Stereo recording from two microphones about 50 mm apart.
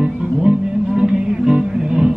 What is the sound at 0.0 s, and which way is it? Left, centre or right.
Music, centre.